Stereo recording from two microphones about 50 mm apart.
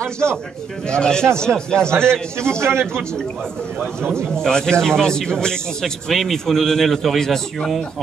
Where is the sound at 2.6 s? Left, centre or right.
Right.